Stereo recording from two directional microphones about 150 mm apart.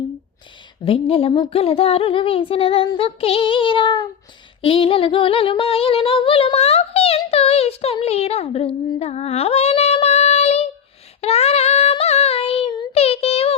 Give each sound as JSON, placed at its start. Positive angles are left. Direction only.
{"t": 0.9, "sound": "speech", "side_deg": 40}
{"t": 4.6, "sound": "singing", "side_deg": 35}
{"t": 11.2, "sound": "child singing", "side_deg": 45}